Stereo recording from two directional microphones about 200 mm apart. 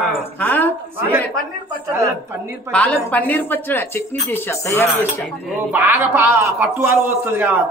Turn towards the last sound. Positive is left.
turn(degrees=-10)  # may be behind; listen again after turning